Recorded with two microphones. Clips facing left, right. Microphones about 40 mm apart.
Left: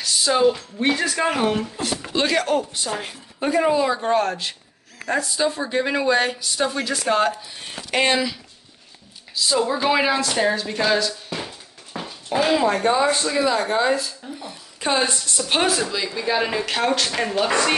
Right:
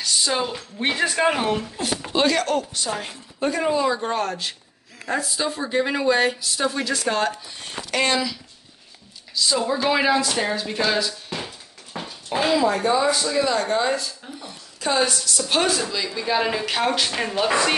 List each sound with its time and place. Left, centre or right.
0.0 s a woman's voice: centre
0.8 s speech: centre
1.4 s speech: centre
7.9 s speech: left
9.3 s speech: centre
11.2 s a sound: centre
12.5 s speech: left
13.3 s speech: centre
14.8 s speech: left
15.6 s speech: centre